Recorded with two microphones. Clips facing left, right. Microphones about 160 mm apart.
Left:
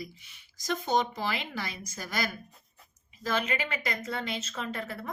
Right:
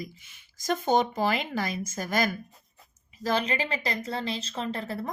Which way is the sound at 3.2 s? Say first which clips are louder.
Right 3 dB; 35° right (ahead or behind).